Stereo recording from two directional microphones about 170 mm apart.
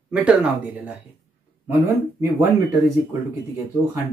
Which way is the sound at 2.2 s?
20° right (ahead or behind).